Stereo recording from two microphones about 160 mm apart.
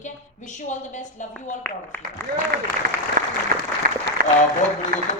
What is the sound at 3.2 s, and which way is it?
Applause, 65° right (ahead or behind).